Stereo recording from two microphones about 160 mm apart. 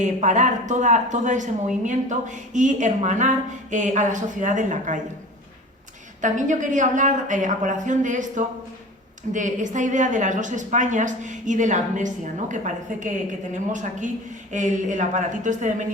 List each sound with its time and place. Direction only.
0.0 s speech: 50° right (ahead or behind)
6.2 s speech: 50° right (ahead or behind)
14.5 s speech: 50° right (ahead or behind)